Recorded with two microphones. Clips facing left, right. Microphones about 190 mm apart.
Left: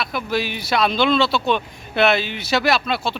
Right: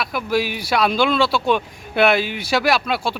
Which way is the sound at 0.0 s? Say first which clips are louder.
Right 2 dB; 10° right (ahead or behind).